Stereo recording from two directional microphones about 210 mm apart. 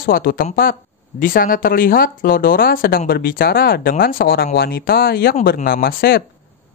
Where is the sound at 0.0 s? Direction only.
45° left (ahead or behind).